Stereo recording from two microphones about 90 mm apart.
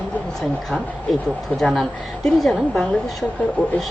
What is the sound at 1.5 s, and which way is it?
A woman's voice, centre (ahead or behind).